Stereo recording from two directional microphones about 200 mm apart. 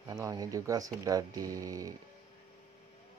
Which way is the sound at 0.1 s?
20° right (ahead or behind).